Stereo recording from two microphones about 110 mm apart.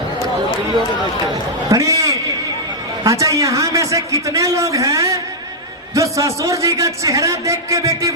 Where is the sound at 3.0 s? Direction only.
30° right (ahead or behind).